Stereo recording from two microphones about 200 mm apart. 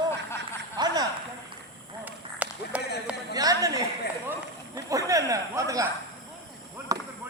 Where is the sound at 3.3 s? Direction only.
20° right (ahead or behind).